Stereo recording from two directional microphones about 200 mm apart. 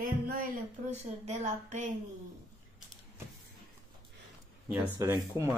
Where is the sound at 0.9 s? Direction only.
35° right (ahead or behind).